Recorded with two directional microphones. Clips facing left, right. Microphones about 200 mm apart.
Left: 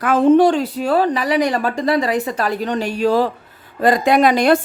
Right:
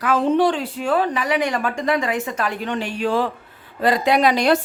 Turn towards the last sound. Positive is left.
turn(degrees=50)  # may be behind; listen again after turning